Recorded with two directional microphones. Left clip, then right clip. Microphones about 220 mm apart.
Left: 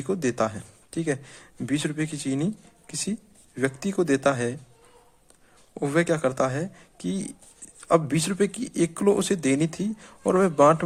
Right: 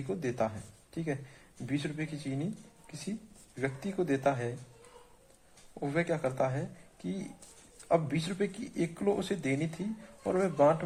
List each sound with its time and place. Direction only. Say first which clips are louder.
0.1 s speech: left 8 dB; 40° left (ahead or behind)
5.7 s speech: left 9 dB; 40° left (ahead or behind)